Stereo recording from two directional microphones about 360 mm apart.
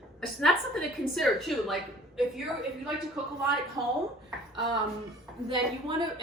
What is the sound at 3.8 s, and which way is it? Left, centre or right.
Speech, centre.